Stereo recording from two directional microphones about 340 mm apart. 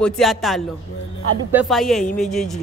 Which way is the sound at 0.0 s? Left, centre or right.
Centre.